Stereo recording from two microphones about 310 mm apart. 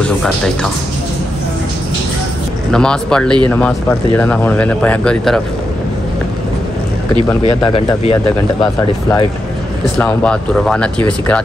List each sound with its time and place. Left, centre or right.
0.0 s speech: centre
2.7 s speech: centre
7.2 s speech: centre
9.9 s speech: centre